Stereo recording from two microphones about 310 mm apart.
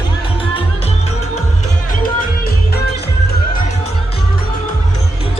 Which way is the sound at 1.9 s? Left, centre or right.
Left.